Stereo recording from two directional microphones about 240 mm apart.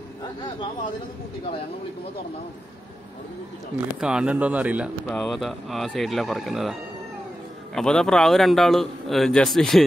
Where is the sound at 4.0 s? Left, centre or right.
Centre.